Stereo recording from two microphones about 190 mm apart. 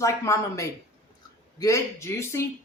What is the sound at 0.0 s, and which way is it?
A woman's voice, 15° left (ahead or behind).